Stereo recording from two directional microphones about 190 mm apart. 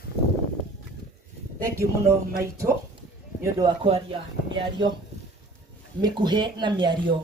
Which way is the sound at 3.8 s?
30° right (ahead or behind).